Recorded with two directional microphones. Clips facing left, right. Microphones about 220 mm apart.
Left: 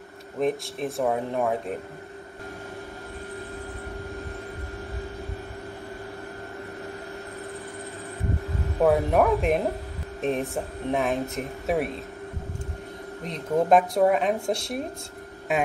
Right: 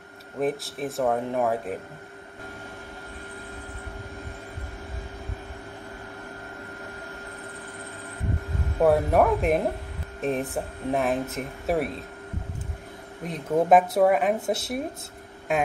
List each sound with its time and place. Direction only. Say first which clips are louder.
0.4 s speech: left 1 dB; centre (ahead or behind)
8.8 s speech: even; centre (ahead or behind)
13.2 s speech: right 1 dB; 5° right (ahead or behind)